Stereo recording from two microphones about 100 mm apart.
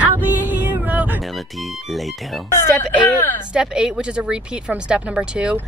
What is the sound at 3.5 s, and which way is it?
Speech, 10° right (ahead or behind).